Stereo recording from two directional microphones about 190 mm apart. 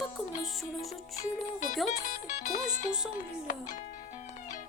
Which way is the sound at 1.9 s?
40° left (ahead or behind).